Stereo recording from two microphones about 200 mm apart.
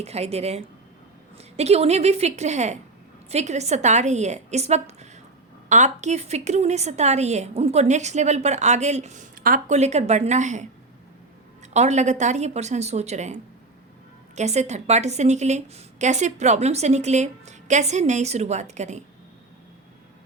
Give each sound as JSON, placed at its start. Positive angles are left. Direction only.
{"t": 0.0, "sound": "a woman's voice", "side_deg": -30}